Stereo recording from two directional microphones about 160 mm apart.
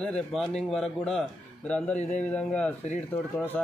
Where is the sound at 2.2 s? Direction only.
10° left (ahead or behind).